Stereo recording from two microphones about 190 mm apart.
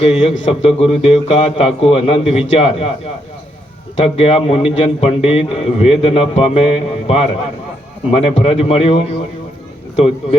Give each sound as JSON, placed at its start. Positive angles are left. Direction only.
{"t": 0.0, "sound": "a man's voice", "side_deg": 30}
{"t": 4.0, "sound": "a man's voice", "side_deg": 30}